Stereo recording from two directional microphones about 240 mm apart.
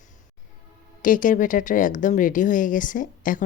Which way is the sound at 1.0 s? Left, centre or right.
Left.